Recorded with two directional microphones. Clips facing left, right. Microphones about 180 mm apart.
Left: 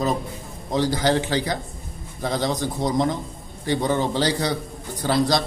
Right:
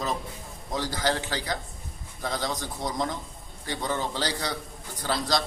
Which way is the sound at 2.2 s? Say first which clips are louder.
Left 7 dB; 20° left (ahead or behind).